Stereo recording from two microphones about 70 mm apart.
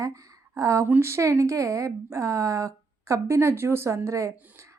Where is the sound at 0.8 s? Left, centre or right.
Right.